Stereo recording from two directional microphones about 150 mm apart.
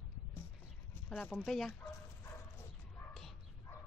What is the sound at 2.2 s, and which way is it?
Bow-wow, 15° left (ahead or behind).